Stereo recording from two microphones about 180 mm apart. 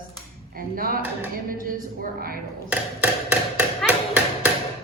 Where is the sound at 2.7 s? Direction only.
10° right (ahead or behind).